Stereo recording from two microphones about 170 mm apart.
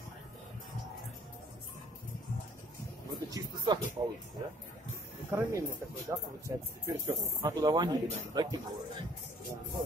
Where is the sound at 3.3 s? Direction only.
25° right (ahead or behind).